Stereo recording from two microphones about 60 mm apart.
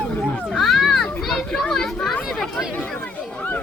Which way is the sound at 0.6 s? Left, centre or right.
Centre.